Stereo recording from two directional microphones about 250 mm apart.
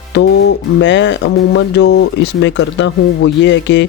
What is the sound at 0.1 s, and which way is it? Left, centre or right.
Speech, left.